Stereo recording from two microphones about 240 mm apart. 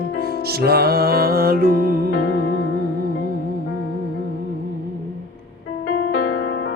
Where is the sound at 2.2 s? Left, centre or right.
Left.